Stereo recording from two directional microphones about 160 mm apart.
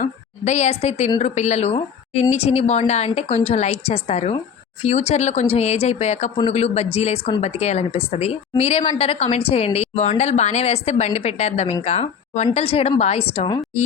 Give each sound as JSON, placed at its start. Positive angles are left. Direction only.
{"t": 0.0, "sound": "a woman's voice", "side_deg": 45}